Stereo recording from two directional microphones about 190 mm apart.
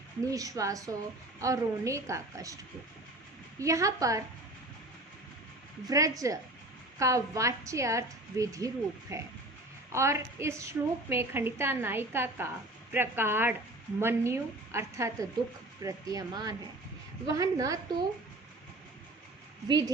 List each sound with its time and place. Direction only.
0.3 s a woman's voice: 20° right (ahead or behind)
3.6 s a woman's voice: 15° right (ahead or behind)
5.8 s a woman's voice: 20° right (ahead or behind)
19.6 s speech: 20° right (ahead or behind)